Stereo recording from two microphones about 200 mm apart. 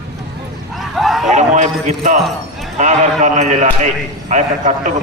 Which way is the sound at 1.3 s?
35° right (ahead or behind).